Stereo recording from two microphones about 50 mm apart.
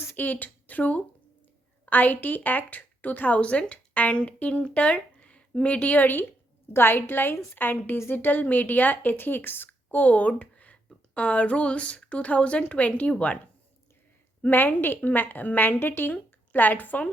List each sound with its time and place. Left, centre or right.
0.2 s speech: left
6.7 s a woman's voice: left
14.4 s a woman's voice: left